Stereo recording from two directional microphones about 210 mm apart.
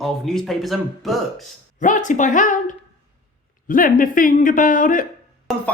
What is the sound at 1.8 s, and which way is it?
Speech, 35° left (ahead or behind).